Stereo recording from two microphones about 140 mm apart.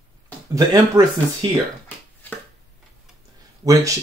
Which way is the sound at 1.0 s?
20° right (ahead or behind).